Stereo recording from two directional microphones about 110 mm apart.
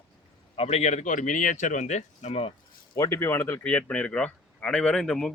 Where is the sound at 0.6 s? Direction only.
70° left (ahead or behind); by 2.4 s 90° left.